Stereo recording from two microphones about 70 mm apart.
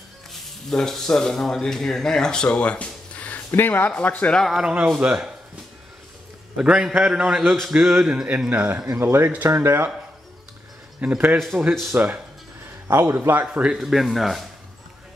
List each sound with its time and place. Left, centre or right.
0.3 s speech: centre; by 4.4 s left
4.6 s a man's voice: centre
6.5 s a man's voice: centre; by 9.8 s right
11.0 s speech: right
11.3 s speech: centre
11.9 s speech: right
12.8 s a man's voice: right
13.5 s a man's voice: centre
13.7 s speech: centre